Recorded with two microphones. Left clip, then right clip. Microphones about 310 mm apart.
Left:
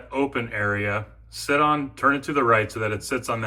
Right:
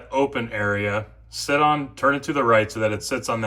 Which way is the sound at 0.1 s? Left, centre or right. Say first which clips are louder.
Right 3 dB; centre.